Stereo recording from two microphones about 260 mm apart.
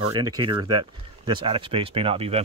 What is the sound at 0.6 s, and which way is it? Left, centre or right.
Speech, right.